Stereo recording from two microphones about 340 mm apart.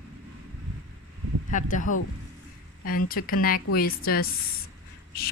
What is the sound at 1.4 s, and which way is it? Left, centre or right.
A woman's voice, left.